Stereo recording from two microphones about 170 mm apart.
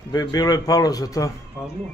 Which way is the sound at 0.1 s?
20° left (ahead or behind).